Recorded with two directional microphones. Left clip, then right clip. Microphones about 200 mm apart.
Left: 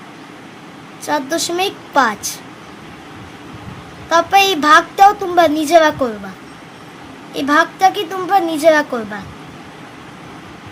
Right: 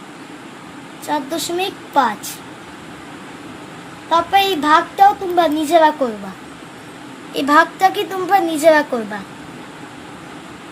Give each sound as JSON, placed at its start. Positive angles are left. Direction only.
{"t": 1.0, "sound": "a child's voice", "side_deg": 25}
{"t": 4.1, "sound": "a child's voice", "side_deg": 25}
{"t": 7.3, "sound": "a woman's voice", "side_deg": 0}